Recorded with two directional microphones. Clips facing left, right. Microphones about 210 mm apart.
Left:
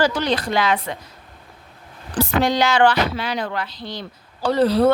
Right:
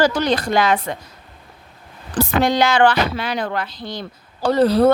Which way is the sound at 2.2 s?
55° right (ahead or behind).